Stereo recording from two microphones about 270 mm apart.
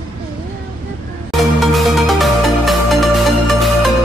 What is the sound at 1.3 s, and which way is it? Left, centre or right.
Music, centre.